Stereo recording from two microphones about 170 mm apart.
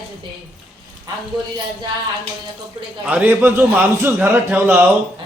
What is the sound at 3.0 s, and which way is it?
A man's voice, 10° right (ahead or behind).